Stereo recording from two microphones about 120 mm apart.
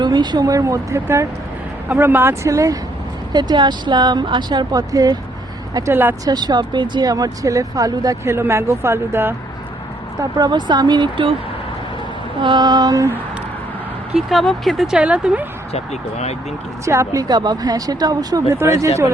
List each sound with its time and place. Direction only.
0.0 s speech: 35° right (ahead or behind)
3.3 s speech: 35° right (ahead or behind); by 6.1 s 20° right (ahead or behind)
6.2 s speech: 35° right (ahead or behind)
10.3 s speech: 35° right (ahead or behind)
12.4 s speech: 35° right (ahead or behind)
14.2 s speech: centre (ahead or behind)
15.7 s speech: 65° left (ahead or behind)
16.8 s speech: 25° right (ahead or behind)